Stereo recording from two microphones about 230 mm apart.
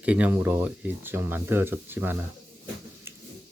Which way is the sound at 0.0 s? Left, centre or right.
Centre.